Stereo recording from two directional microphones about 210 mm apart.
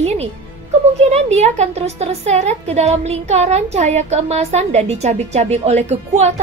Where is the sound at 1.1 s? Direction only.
30° right (ahead or behind).